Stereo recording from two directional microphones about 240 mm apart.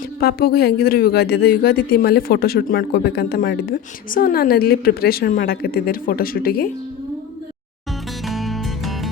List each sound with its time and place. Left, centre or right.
0.2 s speech: left
8.3 s music: centre